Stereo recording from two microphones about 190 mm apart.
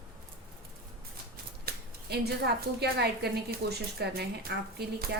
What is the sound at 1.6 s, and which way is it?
A woman's voice, 60° right (ahead or behind).